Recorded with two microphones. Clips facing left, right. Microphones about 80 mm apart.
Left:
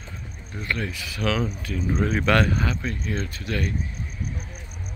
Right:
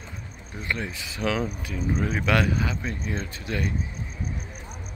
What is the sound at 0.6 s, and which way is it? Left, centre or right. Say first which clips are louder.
Speech: left 2 dB; right.